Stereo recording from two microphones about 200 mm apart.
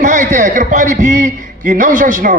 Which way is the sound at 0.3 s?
40° right (ahead or behind).